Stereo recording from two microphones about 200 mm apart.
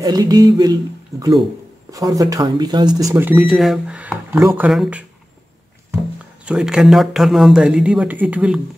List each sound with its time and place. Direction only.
0.0 s a sound: 20° right (ahead or behind)
1.9 s speech: 15° right (ahead or behind)
3.3 s speech: centre (ahead or behind)
6.4 s speech: 5° right (ahead or behind)